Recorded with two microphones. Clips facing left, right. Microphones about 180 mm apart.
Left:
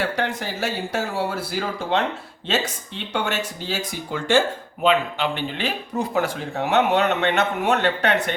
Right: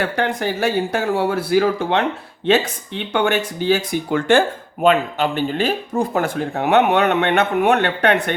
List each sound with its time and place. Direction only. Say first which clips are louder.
0.0 s speech: right 4 dB; 55° right (ahead or behind)
3.1 s speech: right 7 dB; 60° right (ahead or behind)